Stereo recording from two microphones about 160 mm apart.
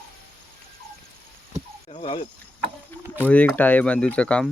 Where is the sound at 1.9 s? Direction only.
35° left (ahead or behind).